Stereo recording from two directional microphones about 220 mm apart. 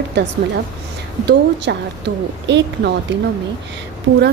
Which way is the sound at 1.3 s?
50° right (ahead or behind).